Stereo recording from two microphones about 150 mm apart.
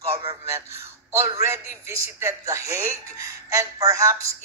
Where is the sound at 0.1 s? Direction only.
40° right (ahead or behind).